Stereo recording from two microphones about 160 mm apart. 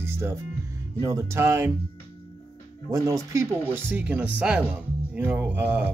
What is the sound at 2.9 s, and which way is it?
Speech, 20° right (ahead or behind).